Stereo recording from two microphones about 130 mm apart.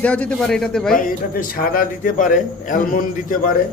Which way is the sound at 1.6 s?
90° left.